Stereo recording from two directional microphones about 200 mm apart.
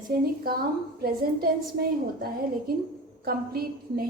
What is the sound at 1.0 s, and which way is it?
A woman's voice, 50° right (ahead or behind).